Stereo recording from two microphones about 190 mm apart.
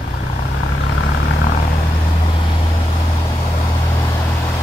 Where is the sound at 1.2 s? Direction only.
50° left (ahead or behind).